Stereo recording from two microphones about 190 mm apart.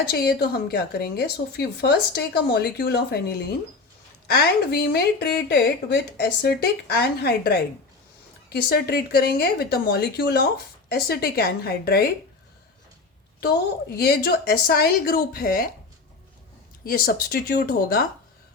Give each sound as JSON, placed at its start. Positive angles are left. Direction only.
{"t": 0.1, "sound": "speech", "side_deg": 55}
{"t": 4.3, "sound": "speech", "side_deg": 55}
{"t": 14.0, "sound": "speech", "side_deg": 55}
{"t": 16.8, "sound": "speech", "side_deg": 50}